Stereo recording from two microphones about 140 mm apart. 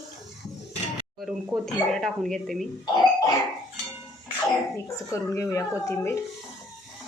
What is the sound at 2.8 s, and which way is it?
Speech, 30° left (ahead or behind).